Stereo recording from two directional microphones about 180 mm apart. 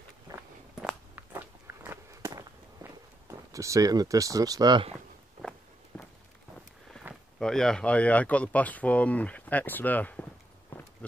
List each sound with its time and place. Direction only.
0.7 s biting: 5° right (ahead or behind)
1.8 s walk: 15° right (ahead or behind)
3.5 s speech: 15° right (ahead or behind)
5.9 s walk: 10° left (ahead or behind)
6.9 s speech: centre (ahead or behind)